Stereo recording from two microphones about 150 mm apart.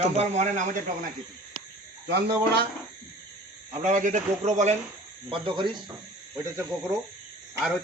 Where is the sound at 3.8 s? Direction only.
55° right (ahead or behind).